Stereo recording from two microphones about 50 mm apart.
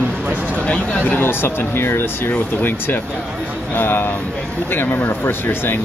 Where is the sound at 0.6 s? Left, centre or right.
Left.